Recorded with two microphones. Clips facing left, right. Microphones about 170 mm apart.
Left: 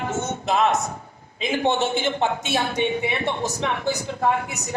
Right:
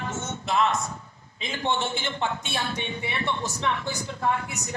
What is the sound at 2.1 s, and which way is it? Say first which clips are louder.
Speech: left 7 dB; 55° left (ahead or behind).